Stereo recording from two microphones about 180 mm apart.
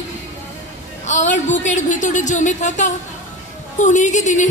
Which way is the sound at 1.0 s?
40° left (ahead or behind).